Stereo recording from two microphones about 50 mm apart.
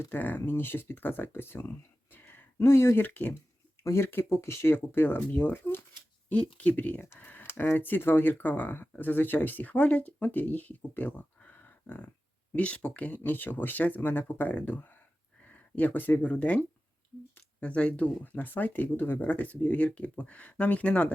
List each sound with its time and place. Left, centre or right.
0.1 s speech: left
2.1 s a sound: left
2.6 s speech: left
2.9 s speech: left
3.8 s speech: left
6.6 s speech: left
12.5 s speech: left
13.1 s speech: left
15.4 s a sound: left
16.3 s speech: left
17.6 s speech: left
19.3 s speech: left